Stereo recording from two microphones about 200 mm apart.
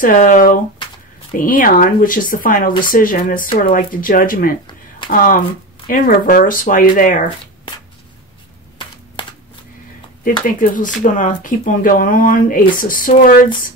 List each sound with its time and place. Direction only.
0.0 s speech: 40° left (ahead or behind)
10.2 s speech: 45° left (ahead or behind)